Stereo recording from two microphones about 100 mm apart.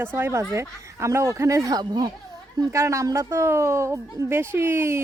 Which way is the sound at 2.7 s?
30° right (ahead or behind).